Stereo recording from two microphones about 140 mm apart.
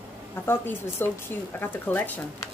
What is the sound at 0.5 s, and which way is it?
Speech, 15° left (ahead or behind).